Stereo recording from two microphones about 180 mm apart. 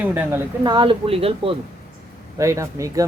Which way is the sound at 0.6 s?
25° right (ahead or behind).